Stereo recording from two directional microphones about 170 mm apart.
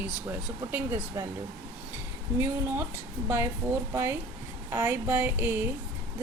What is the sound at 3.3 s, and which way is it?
Speech, 15° right (ahead or behind).